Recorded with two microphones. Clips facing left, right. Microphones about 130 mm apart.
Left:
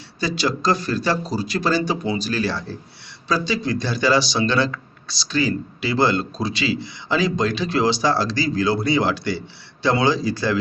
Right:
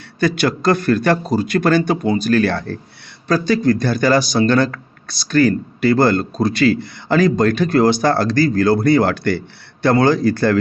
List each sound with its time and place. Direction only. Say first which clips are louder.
0.2 s a man's voice: right 5 dB; 55° right (ahead or behind)